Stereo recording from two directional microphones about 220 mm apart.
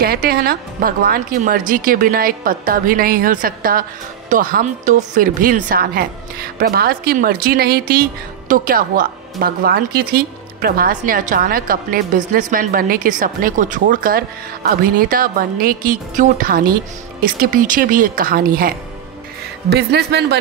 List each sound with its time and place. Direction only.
0.0 s speech: 45° right (ahead or behind)